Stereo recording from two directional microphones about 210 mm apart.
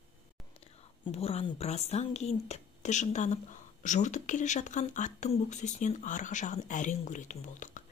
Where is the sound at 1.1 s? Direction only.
30° left (ahead or behind).